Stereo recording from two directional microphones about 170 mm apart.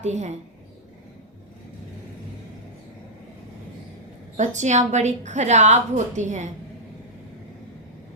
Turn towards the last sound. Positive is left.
turn(degrees=-45)  # may be behind; listen again after turning